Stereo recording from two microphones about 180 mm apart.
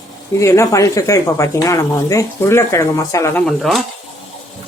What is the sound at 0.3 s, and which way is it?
Speech, 15° left (ahead or behind).